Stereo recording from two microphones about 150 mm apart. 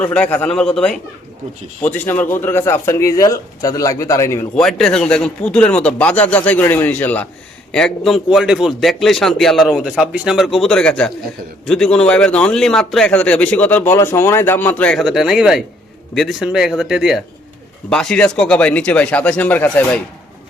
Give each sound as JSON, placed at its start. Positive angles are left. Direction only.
{"t": 0.0, "sound": "a man's voice", "side_deg": 10}
{"t": 4.5, "sound": "a man's voice", "side_deg": 5}
{"t": 15.0, "sound": "a man's voice", "side_deg": -5}